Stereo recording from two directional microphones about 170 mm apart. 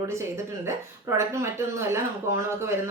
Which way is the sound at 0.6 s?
15° right (ahead or behind).